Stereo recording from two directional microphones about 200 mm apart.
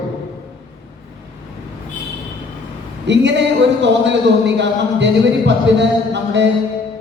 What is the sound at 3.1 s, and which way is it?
Speech, 60° right (ahead or behind).